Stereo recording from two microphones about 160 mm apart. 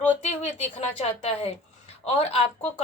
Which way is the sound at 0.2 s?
40° left (ahead or behind).